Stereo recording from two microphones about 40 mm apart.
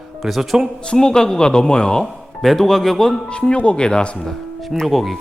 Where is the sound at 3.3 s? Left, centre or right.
Left.